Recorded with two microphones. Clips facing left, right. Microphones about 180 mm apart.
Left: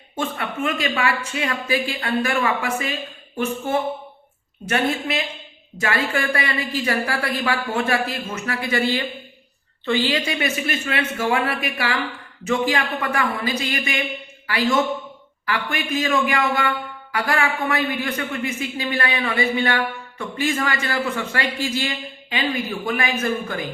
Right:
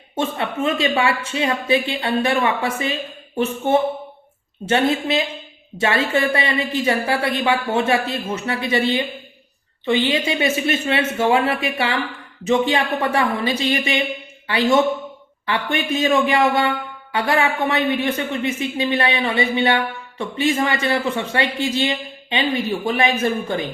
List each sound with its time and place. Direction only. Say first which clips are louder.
0.2 s a man's voice: right 3 dB; 25° right (ahead or behind)